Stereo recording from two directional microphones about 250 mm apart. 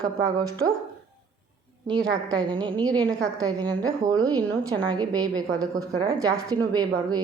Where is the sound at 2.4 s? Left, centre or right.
Centre.